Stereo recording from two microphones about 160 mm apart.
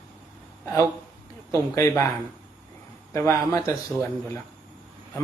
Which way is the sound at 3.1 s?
20° left (ahead or behind).